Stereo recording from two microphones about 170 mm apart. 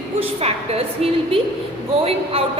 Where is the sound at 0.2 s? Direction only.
35° right (ahead or behind).